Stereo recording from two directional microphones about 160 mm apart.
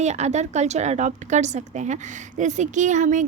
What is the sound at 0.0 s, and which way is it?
A woman's voice, 45° right (ahead or behind).